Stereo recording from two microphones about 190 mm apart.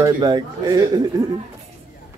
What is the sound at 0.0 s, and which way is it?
A man's voice, 20° right (ahead or behind).